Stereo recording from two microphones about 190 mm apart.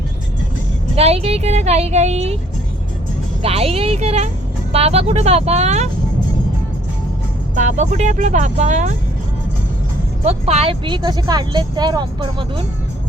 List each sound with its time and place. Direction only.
0.9 s speech: 35° right (ahead or behind)
3.4 s speech: 30° right (ahead or behind)
7.5 s speech: 40° right (ahead or behind)
10.2 s speech: 35° right (ahead or behind)